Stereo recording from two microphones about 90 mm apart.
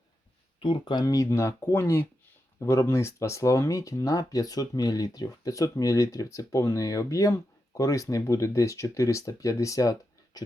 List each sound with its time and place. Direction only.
0.6 s speech: 60° left (ahead or behind)
1.0 s speech: 40° left (ahead or behind)